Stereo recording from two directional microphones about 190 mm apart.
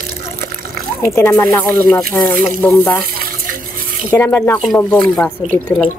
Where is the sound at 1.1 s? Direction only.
15° left (ahead or behind).